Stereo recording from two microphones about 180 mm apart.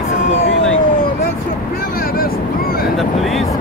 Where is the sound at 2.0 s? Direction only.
55° left (ahead or behind).